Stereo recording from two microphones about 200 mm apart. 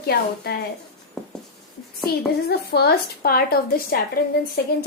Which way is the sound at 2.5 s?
55° left (ahead or behind).